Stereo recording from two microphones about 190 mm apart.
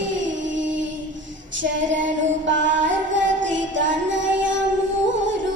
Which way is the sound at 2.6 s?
75° right (ahead or behind).